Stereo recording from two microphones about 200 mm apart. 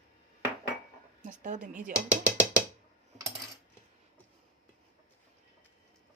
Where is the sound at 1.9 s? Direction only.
5° right (ahead or behind).